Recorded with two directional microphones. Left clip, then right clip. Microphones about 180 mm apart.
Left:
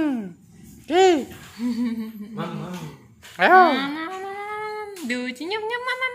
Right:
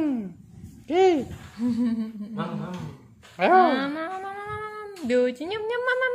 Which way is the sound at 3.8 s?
60° right (ahead or behind).